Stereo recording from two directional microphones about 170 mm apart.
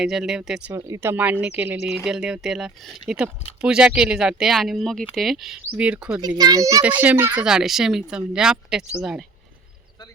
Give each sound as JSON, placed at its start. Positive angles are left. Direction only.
{"t": 0.0, "sound": "speech", "side_deg": -5}
{"t": 0.7, "sound": "speech", "side_deg": -20}
{"t": 6.2, "sound": "a child's voice", "side_deg": -25}